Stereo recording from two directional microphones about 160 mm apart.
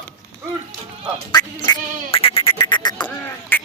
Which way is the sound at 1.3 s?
30° left (ahead or behind).